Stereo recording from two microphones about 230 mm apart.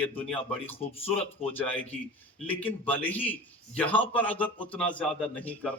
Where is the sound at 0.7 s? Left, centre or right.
Left.